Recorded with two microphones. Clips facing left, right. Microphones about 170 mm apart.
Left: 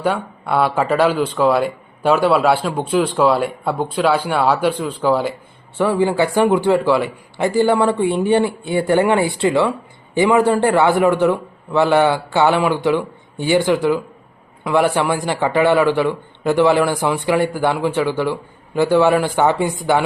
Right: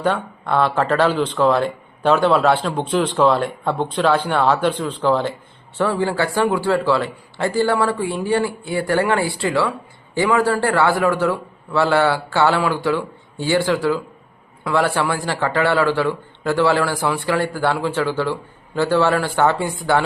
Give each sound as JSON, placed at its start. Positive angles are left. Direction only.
{"t": 0.0, "sound": "a man's voice", "side_deg": 10}